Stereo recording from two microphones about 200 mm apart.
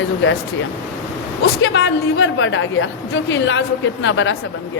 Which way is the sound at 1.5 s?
75° left (ahead or behind).